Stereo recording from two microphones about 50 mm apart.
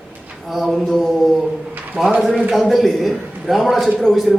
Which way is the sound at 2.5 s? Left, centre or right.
Centre.